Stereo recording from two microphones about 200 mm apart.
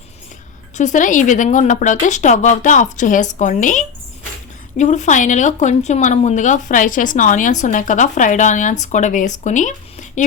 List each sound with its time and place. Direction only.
0.8 s speech: 40° left (ahead or behind)